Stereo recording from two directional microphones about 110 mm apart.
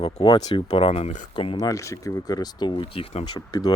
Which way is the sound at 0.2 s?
55° left (ahead or behind).